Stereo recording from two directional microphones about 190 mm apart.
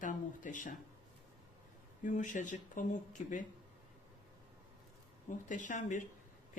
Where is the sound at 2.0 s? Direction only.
40° left (ahead or behind).